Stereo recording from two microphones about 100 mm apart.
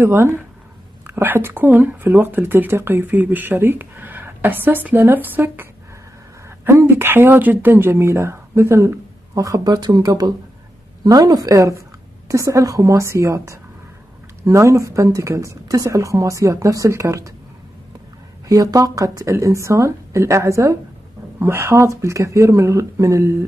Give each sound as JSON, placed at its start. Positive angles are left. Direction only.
{"t": 0.0, "sound": "speech", "side_deg": -25}
{"t": 18.5, "sound": "speech", "side_deg": -35}